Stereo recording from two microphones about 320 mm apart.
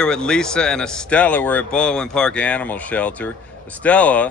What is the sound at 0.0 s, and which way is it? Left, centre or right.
Speech, centre.